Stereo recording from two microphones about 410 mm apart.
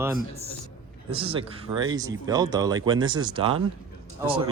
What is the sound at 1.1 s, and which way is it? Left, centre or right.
Speech, centre.